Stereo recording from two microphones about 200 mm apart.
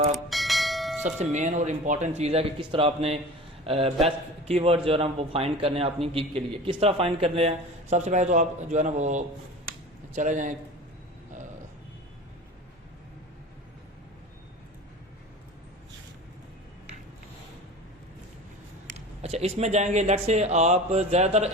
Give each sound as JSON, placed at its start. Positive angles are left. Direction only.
{"t": 0.1, "sound": "bell", "side_deg": 0}
{"t": 1.2, "sound": "a man's voice", "side_deg": -35}
{"t": 18.9, "sound": "speech", "side_deg": -30}